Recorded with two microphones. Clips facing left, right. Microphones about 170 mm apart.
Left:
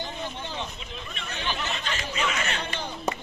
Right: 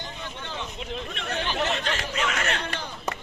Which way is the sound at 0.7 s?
70° right (ahead or behind).